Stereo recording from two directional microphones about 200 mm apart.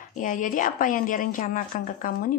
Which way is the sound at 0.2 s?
40° left (ahead or behind).